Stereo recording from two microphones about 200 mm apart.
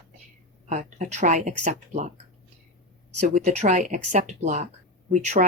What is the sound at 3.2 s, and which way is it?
Speech, 40° right (ahead or behind).